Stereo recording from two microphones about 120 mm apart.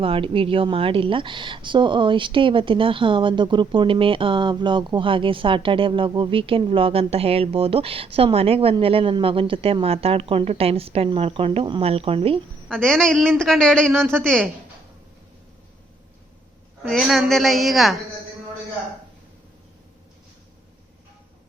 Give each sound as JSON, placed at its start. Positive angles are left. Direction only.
{"t": 0.0, "sound": "speech", "side_deg": -50}
{"t": 12.6, "sound": "a man's voice", "side_deg": 5}
{"t": 16.9, "sound": "a man's voice", "side_deg": 0}